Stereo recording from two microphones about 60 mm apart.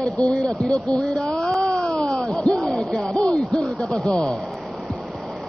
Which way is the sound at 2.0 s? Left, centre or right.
Centre.